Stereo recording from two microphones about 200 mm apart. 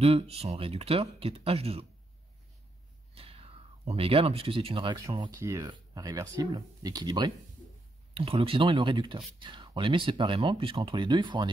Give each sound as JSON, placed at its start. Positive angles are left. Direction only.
{"t": 0.0, "sound": "speech", "side_deg": -30}
{"t": 3.2, "sound": "speech", "side_deg": -30}